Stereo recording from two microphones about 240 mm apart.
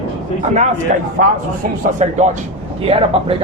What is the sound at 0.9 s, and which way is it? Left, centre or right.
A man's voice, right.